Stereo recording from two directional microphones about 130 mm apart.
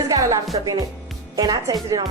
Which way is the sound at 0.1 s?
25° right (ahead or behind).